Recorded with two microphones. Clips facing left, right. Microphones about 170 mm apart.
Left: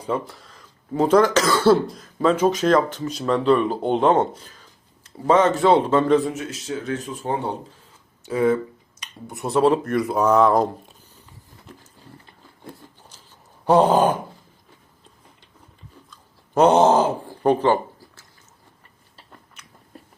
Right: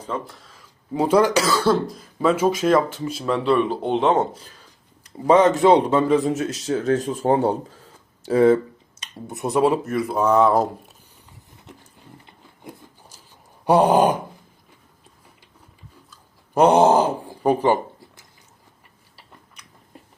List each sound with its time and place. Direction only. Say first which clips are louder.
0.3 s speech: left 1 dB; centre (ahead or behind)
0.9 s speech: left 1 dB; 10° right (ahead or behind)
1.5 s speech: left 3 dB; centre (ahead or behind)
5.1 s speech: right 2 dB; 15° right (ahead or behind)
6.3 s speech: right 6 dB; 40° right (ahead or behind)
9.0 s speech: right 3 dB; 20° right (ahead or behind); by 10.7 s centre (ahead or behind)
11.6 s horse: even; 20° right (ahead or behind)
13.7 s speech: even; 10° right (ahead or behind)
16.6 s speech: even; 10° right (ahead or behind)
18.0 s a sound: right 1 dB; 15° right (ahead or behind)